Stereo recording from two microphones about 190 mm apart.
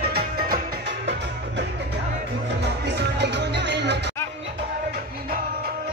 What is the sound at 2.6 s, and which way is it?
Music, 60° right (ahead or behind).